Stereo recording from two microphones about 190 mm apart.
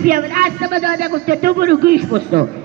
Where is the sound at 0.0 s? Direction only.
50° right (ahead or behind).